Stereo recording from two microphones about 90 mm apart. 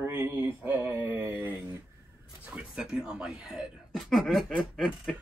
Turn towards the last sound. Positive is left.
turn(degrees=0)  # may be behind; listen again after turning